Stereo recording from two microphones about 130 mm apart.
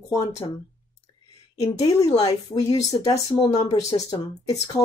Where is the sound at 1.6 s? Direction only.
25° left (ahead or behind).